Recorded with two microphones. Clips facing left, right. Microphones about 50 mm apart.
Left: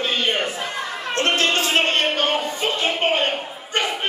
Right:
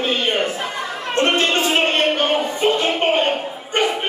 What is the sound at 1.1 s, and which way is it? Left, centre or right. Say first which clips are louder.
Speech: right 3 dB; right.